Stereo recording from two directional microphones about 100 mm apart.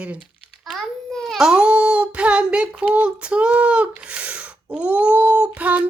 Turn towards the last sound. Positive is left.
turn(degrees=-15)  # may be behind; listen again after turning